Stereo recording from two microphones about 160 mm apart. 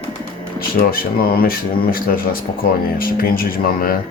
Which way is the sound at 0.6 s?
70° left (ahead or behind).